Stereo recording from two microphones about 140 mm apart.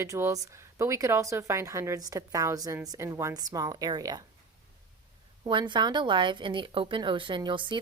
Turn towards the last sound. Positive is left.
turn(degrees=-35)  # may be behind; listen again after turning